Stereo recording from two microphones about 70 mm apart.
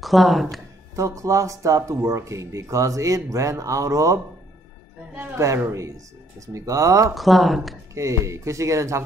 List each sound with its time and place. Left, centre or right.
0.0 s speech: centre
0.9 s speech: right
5.6 s speech: right
7.2 s speech: centre
7.9 s speech: right